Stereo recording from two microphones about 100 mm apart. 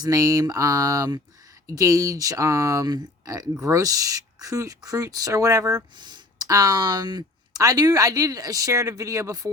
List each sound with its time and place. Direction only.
0.0 s speech: 35° right (ahead or behind)